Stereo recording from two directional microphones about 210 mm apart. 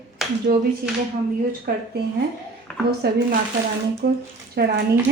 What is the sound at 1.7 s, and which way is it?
Speech, 45° right (ahead or behind).